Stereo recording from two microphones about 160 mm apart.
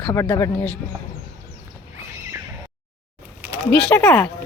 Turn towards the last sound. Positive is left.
turn(degrees=10)  # may be behind; listen again after turning